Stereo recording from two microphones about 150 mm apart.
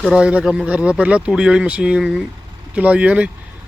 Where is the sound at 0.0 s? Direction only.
5° right (ahead or behind).